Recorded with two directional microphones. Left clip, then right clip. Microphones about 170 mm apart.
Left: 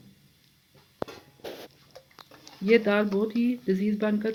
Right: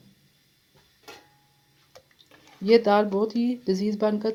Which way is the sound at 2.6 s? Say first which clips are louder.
Right 3 dB; 55° right (ahead or behind).